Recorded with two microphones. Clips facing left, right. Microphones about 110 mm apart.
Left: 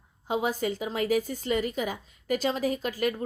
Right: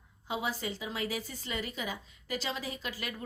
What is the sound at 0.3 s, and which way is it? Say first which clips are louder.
A woman's voice: left 7 dB; 45° left (ahead or behind).